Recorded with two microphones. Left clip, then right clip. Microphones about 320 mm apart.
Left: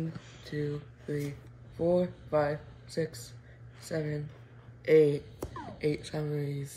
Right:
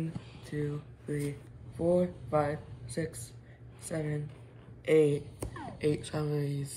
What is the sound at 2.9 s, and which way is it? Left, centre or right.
Speech, centre.